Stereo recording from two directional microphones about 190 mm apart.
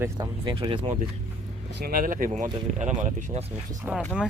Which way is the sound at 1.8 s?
50° right (ahead or behind).